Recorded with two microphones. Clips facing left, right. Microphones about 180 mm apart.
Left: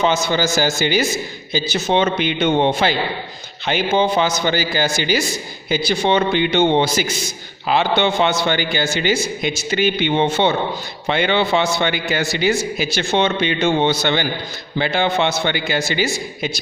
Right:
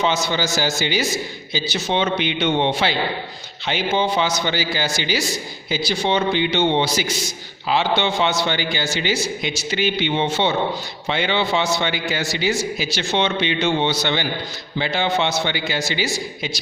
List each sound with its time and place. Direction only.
0.0 s a man's voice: 50° left (ahead or behind)